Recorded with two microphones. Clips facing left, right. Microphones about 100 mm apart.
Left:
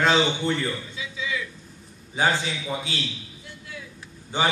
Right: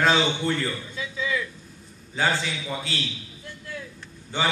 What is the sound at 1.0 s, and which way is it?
Throat clearing, 45° right (ahead or behind).